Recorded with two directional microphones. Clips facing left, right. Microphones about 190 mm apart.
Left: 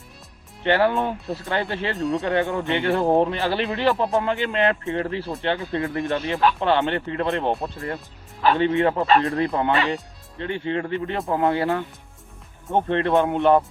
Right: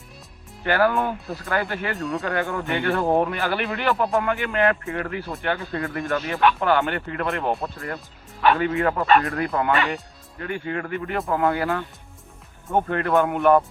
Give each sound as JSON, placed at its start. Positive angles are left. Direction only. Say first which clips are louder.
{"t": 0.6, "sound": "speech", "louder": "left 1 dB", "side_deg": 25}